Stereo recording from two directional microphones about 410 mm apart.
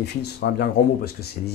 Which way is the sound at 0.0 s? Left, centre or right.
Left.